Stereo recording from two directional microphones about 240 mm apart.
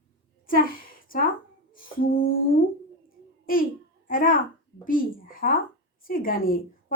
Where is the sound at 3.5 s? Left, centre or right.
Left.